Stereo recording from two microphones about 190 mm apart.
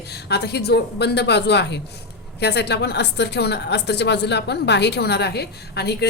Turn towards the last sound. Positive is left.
turn(degrees=60)  # may be behind; listen again after turning